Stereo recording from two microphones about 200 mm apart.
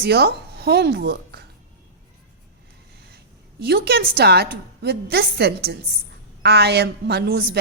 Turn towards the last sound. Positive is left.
turn(degrees=-55)  # may be behind; listen again after turning